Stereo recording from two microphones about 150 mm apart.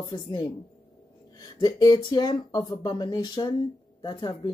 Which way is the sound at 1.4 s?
25° left (ahead or behind).